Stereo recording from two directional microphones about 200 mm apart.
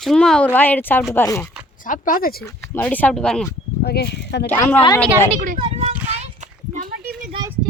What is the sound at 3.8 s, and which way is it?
Speech, 55° left (ahead or behind).